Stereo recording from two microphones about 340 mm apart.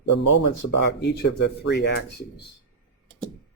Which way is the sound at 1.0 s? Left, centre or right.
Left.